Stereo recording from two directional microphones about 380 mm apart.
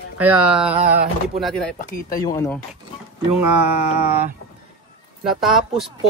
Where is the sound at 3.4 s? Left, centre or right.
Right.